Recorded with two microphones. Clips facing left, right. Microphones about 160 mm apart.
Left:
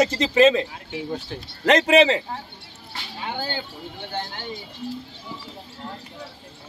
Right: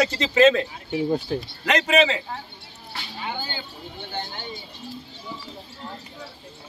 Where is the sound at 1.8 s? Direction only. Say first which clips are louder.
Left 2 dB; 30° left (ahead or behind).